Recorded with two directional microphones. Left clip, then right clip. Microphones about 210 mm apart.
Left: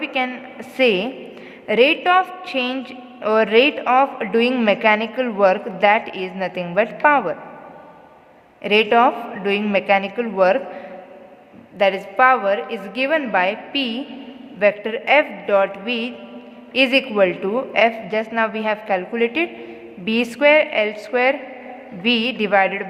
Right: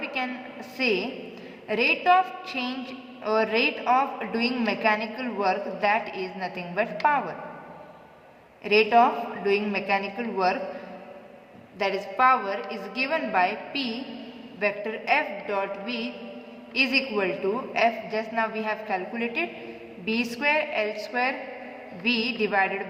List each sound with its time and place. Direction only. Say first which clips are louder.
0.0 s a sound: left 8 dB; 45° left (ahead or behind)
0.8 s a woman's voice: left 9 dB; 45° left (ahead or behind)
8.6 s a woman's voice: left 5 dB; 45° left (ahead or behind)
11.8 s a woman's voice: left 8 dB; 40° left (ahead or behind)